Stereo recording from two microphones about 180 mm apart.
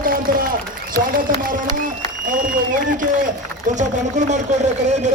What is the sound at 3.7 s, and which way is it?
Speech, 45° right (ahead or behind).